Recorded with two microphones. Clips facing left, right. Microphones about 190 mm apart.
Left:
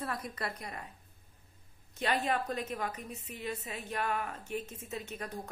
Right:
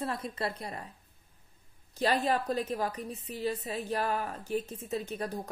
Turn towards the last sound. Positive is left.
turn(degrees=-35)  # may be behind; listen again after turning